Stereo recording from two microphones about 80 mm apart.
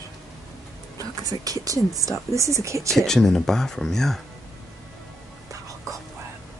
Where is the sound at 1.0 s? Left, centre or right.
Right.